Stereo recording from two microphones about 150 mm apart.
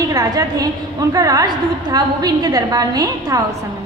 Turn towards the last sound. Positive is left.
turn(degrees=-25)  # may be behind; listen again after turning